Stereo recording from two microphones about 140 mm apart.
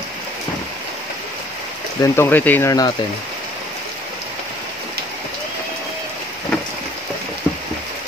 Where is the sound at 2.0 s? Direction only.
20° left (ahead or behind).